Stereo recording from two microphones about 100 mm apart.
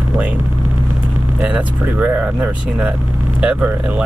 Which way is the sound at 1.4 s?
15° right (ahead or behind).